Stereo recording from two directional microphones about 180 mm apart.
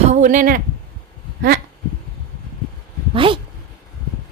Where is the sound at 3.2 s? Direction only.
30° right (ahead or behind).